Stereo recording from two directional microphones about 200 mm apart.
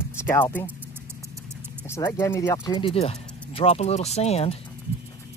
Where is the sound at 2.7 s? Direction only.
30° left (ahead or behind).